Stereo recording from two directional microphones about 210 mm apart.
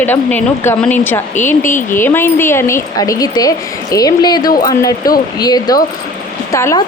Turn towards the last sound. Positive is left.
turn(degrees=15)  # may be behind; listen again after turning